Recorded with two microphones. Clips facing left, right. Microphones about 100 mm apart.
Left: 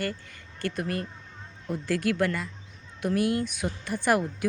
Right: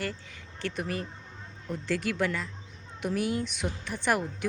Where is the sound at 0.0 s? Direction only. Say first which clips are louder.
Left 3 dB; centre (ahead or behind).